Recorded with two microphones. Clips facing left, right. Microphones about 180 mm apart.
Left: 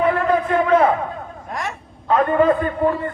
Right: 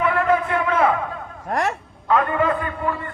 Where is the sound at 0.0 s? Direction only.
40° left (ahead or behind).